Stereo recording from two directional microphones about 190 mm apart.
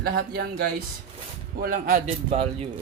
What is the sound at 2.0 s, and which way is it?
Speech, 35° right (ahead or behind).